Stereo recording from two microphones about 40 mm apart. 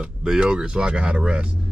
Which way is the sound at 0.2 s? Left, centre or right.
Centre.